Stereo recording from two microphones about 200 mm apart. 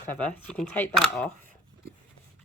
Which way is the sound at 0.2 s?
5° left (ahead or behind).